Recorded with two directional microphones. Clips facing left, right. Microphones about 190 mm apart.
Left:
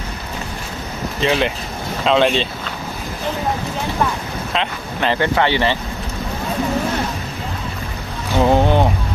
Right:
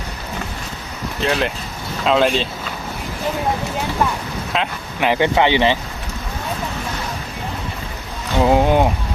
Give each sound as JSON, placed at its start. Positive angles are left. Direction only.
{"t": 1.2, "sound": "speech", "side_deg": 0}
{"t": 4.5, "sound": "speech", "side_deg": -10}
{"t": 8.4, "sound": "boat", "side_deg": -10}